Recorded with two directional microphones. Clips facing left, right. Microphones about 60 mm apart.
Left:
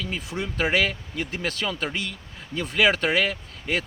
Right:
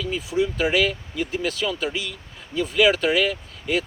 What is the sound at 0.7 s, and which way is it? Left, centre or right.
Speech, left.